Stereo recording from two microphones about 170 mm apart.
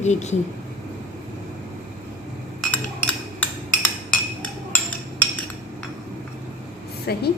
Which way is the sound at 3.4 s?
10° left (ahead or behind).